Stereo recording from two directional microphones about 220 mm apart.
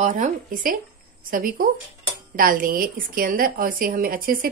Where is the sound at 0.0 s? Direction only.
35° right (ahead or behind).